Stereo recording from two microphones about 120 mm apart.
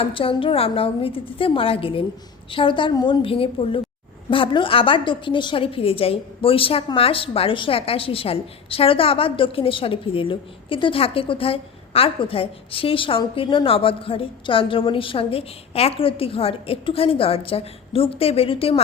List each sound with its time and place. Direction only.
0.0 s a woman's voice: 45° left (ahead or behind)
3.2 s a woman's voice: 50° left (ahead or behind)